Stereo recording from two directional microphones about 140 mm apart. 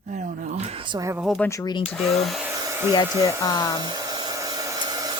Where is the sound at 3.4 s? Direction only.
30° left (ahead or behind).